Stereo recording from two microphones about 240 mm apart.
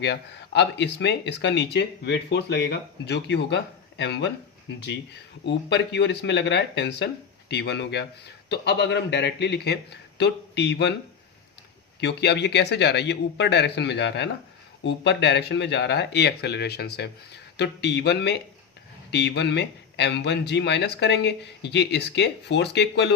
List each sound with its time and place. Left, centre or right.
0.0 s speech: left
5.5 s speech: left
11.9 s speech: left